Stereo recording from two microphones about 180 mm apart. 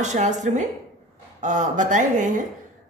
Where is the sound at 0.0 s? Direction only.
40° right (ahead or behind).